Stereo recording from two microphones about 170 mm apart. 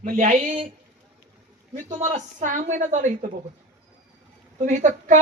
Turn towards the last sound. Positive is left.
turn(degrees=-50)  # may be behind; listen again after turning